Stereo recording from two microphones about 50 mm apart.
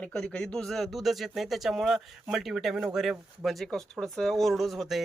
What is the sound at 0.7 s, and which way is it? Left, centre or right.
Speech, centre.